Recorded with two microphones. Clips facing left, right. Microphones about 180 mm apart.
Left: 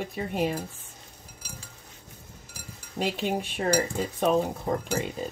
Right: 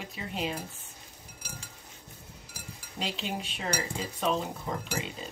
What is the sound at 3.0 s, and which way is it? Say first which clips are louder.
Speech: left 7 dB; 55° left (ahead or behind).